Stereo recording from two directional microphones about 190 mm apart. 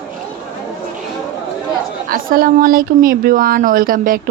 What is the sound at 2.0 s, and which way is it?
Speech, 50° right (ahead or behind).